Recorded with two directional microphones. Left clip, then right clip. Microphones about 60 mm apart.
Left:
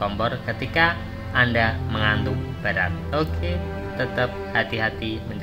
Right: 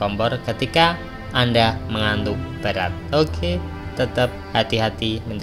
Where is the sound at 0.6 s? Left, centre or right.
Right.